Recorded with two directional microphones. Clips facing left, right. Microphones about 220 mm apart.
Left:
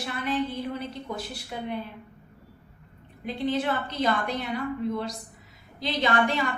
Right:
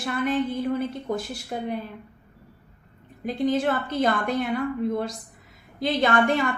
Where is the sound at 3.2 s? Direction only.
45° right (ahead or behind).